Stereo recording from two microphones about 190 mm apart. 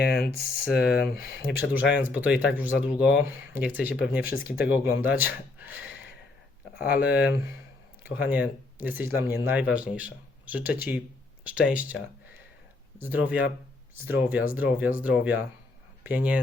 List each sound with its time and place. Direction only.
0.0 s speech: 55° left (ahead or behind)
1.7 s speech: 10° right (ahead or behind)
6.8 s speech: 10° right (ahead or behind)
13.1 s speech: 5° right (ahead or behind)